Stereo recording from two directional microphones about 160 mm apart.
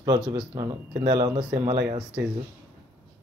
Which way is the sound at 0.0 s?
25° right (ahead or behind).